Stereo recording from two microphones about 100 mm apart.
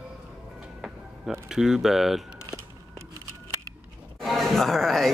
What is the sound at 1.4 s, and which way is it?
Speech, 5° right (ahead or behind).